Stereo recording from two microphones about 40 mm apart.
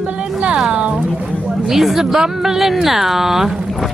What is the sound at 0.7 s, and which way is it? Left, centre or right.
Speech, right.